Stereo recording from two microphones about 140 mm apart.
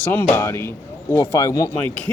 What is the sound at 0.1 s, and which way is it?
A man's voice, 15° left (ahead or behind).